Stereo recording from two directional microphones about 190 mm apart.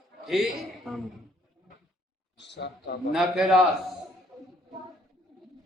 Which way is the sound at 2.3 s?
65° left (ahead or behind).